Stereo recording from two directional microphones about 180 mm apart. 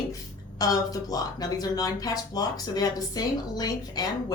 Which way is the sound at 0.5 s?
20° left (ahead or behind).